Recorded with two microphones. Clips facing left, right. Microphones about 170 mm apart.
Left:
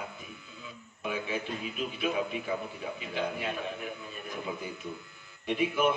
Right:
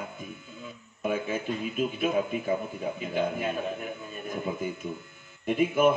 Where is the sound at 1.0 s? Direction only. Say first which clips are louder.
Right 5 dB; 45° right (ahead or behind).